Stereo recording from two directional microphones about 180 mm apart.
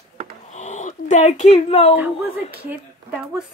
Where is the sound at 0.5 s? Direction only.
40° left (ahead or behind).